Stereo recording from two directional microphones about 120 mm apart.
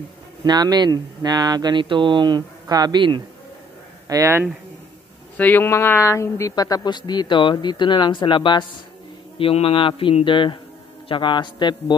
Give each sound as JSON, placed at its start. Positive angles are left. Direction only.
{"t": 0.4, "sound": "speech", "side_deg": -35}
{"t": 4.1, "sound": "speech", "side_deg": -25}
{"t": 5.4, "sound": "a man's voice", "side_deg": 15}